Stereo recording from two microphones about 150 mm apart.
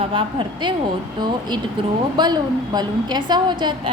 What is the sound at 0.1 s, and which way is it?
Speech, 35° right (ahead or behind).